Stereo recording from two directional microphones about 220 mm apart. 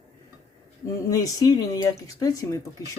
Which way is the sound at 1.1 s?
15° left (ahead or behind).